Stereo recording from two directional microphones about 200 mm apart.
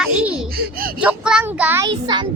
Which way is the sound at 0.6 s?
45° right (ahead or behind).